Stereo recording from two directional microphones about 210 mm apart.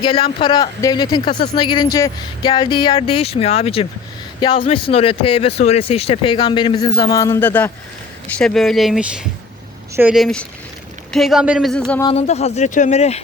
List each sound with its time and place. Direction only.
0.0 s speech: 25° left (ahead or behind); by 11.8 s centre (ahead or behind)
12.0 s speech: 30° left (ahead or behind)